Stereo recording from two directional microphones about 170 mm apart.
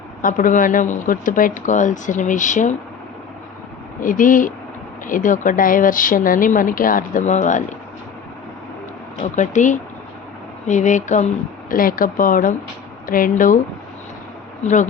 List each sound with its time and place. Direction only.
0.2 s speech: 50° left (ahead or behind)
4.0 s speech: 50° left (ahead or behind)
9.3 s speech: 45° left (ahead or behind)
11.7 s speech: 55° left (ahead or behind)
14.6 s speech: 45° left (ahead or behind)